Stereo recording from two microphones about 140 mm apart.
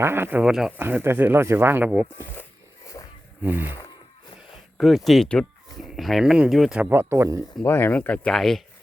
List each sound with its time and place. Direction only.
0.0 s speech: 15° right (ahead or behind)
0.8 s speech: 15° right (ahead or behind)
3.0 s a sound: 30° left (ahead or behind)
3.4 s speech: 10° right (ahead or behind)
4.8 s speech: centre (ahead or behind)
6.9 s speech: 20° right (ahead or behind)
7.6 s speech: 15° left (ahead or behind)